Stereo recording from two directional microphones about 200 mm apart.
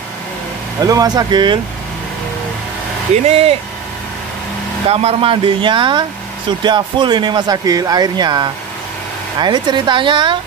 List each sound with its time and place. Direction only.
0.7 s speech: 20° right (ahead or behind)
3.3 s speech: 30° right (ahead or behind)
4.8 s speech: 30° right (ahead or behind)